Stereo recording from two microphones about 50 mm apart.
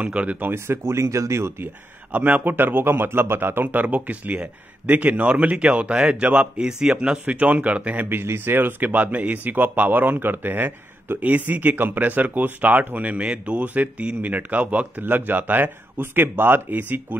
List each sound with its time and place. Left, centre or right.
0.0 s speech: right
0.5 s speech: right
2.1 s speech: right
2.5 s speech: right
3.6 s speech: right; by 7.2 s centre
7.2 s speech: right
8.1 s speech: right
13.2 s speech: right